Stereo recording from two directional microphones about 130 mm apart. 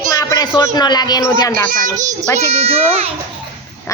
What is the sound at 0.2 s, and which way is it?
Speech, 25° left (ahead or behind).